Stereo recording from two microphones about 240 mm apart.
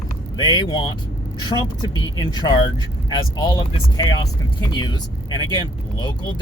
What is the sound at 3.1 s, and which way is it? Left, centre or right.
Speech, centre.